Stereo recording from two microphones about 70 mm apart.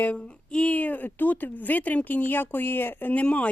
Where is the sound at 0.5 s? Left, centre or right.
Centre.